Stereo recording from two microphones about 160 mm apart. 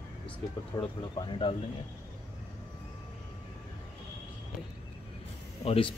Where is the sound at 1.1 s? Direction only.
30° left (ahead or behind).